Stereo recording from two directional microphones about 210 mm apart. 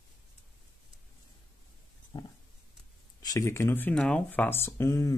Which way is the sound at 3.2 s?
15° left (ahead or behind).